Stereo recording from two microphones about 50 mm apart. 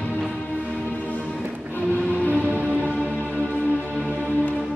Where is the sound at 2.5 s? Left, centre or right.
Right.